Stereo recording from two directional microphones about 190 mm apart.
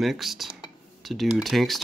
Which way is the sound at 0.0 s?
Centre (ahead or behind).